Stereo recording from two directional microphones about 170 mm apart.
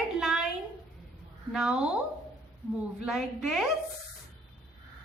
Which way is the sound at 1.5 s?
5° right (ahead or behind).